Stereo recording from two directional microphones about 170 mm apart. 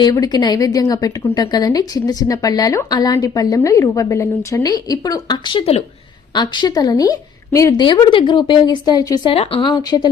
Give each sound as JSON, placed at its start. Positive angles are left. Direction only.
{"t": 0.0, "sound": "a woman's voice", "side_deg": 25}
{"t": 9.3, "sound": "a woman's voice", "side_deg": 35}